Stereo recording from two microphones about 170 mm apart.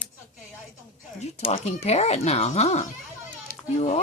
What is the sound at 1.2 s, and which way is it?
Speech, 40° left (ahead or behind).